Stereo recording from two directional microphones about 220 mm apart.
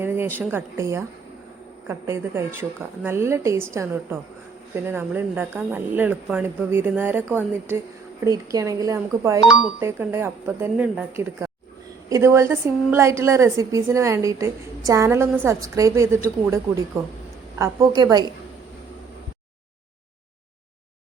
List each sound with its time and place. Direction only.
0.0 s a woman's voice: 10° right (ahead or behind)
9.5 s a woman's voice: centre (ahead or behind); by 18.3 s 20° right (ahead or behind)